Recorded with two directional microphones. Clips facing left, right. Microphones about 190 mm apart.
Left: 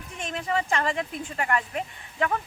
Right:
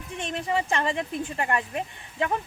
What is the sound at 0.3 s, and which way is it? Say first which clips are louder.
Speech: even; 25° right (ahead or behind).